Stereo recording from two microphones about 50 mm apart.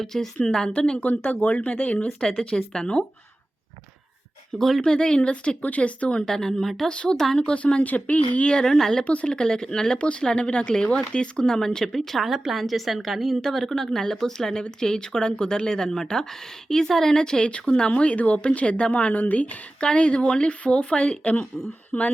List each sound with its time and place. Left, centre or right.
0.0 s a woman's voice: centre
1.2 s speech: left
4.5 s a woman's voice: centre
4.9 s a woman's voice: centre
5.6 s speech: left
6.2 s a woman's voice: centre
6.9 s speech: centre
8.5 s a woman's voice: centre
9.0 s a woman's voice: left
19.8 s a woman's voice: centre